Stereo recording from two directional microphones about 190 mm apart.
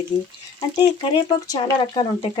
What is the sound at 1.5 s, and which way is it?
Speech, 25° left (ahead or behind).